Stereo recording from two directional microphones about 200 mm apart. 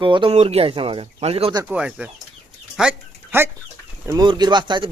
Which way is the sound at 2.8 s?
10° right (ahead or behind).